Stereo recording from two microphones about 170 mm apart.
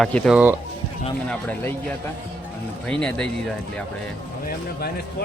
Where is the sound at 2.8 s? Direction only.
5° left (ahead or behind).